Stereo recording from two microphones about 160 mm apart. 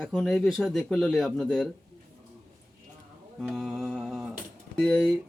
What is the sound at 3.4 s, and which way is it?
Music, centre (ahead or behind).